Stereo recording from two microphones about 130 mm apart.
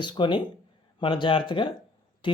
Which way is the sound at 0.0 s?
35° left (ahead or behind).